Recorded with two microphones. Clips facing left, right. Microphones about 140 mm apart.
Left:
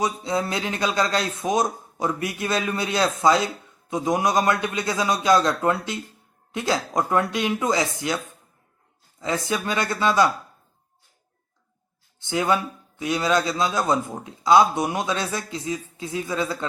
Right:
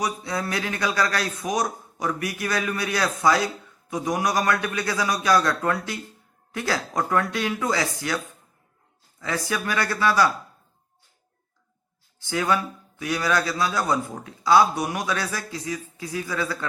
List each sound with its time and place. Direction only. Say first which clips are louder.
0.0 s speech: left 3 dB; 20° left (ahead or behind)
9.2 s speech: left 2 dB; 20° left (ahead or behind)
12.2 s speech: left 2 dB; 20° left (ahead or behind)